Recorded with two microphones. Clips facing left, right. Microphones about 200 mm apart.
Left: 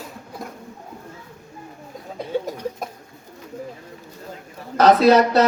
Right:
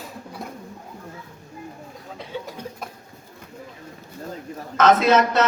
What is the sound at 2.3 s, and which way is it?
Cough, 45° left (ahead or behind).